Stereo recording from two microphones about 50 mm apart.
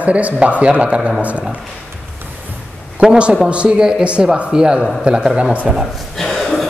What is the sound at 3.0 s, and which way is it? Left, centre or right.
Speech, centre.